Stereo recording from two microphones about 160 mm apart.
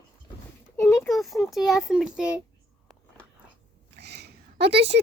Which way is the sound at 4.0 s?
90° right.